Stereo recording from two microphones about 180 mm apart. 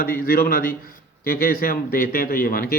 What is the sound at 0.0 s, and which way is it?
A man's voice, 55° left (ahead or behind).